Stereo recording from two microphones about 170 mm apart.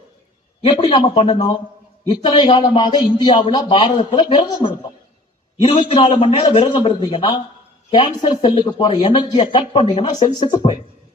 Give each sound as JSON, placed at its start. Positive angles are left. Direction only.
{"t": 0.7, "sound": "a man's voice", "side_deg": 30}